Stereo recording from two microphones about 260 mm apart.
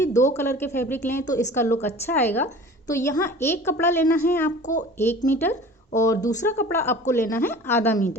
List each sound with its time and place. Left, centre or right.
0.0 s speech: centre
4.6 s a child's voice: left
4.9 s speech: centre